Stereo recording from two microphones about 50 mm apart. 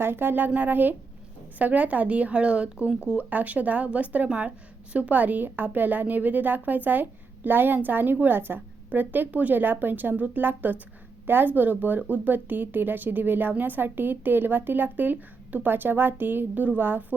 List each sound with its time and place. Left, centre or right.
0.0 s a woman's voice: right